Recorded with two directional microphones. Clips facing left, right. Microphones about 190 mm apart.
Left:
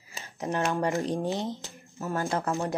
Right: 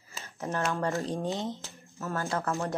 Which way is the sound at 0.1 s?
15° left (ahead or behind).